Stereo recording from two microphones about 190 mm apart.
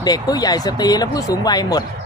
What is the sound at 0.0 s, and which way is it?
Speech, 20° left (ahead or behind).